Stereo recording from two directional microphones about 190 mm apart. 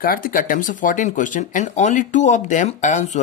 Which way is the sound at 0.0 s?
50° left (ahead or behind).